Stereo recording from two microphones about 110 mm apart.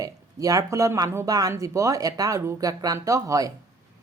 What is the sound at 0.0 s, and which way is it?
Speech, 35° right (ahead or behind).